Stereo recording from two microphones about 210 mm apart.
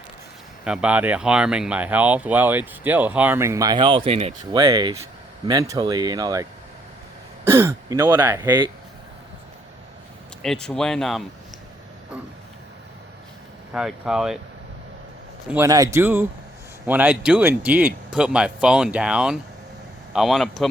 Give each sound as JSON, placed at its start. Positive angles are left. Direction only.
{"t": 0.6, "sound": "speech", "side_deg": -5}
{"t": 4.5, "sound": "speech", "side_deg": -20}
{"t": 10.4, "sound": "speech", "side_deg": 5}
{"t": 13.7, "sound": "speech", "side_deg": -5}
{"t": 15.4, "sound": "speech", "side_deg": -10}